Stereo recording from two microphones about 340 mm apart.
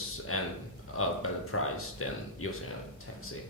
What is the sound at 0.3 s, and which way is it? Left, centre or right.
Speech, left.